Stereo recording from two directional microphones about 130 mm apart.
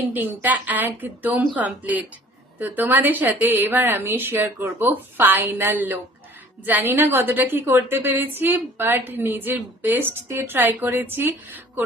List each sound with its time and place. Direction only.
0.1 s a woman's voice: 15° right (ahead or behind)